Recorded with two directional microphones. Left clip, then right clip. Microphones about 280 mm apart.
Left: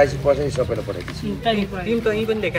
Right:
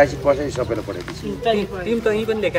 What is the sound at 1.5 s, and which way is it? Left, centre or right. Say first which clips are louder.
Speech: right 1 dB; right.